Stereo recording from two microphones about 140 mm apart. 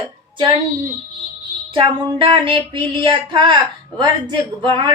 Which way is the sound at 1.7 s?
40° right (ahead or behind).